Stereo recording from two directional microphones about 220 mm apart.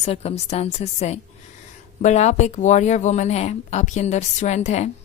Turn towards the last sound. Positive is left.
turn(degrees=30)  # may be behind; listen again after turning